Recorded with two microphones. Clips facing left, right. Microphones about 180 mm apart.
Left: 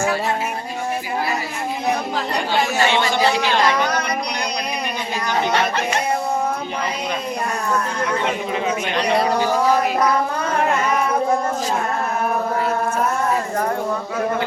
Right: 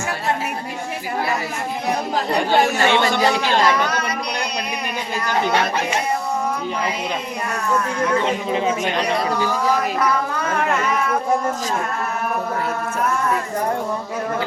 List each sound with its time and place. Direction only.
2.5 s chatter: 50° right (ahead or behind)